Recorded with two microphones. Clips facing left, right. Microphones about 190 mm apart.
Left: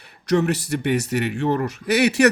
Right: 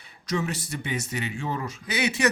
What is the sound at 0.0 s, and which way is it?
Speech, 65° left (ahead or behind).